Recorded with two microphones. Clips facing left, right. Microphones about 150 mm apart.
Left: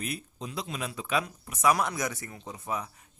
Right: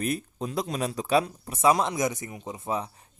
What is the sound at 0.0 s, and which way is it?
Speech, 45° right (ahead or behind).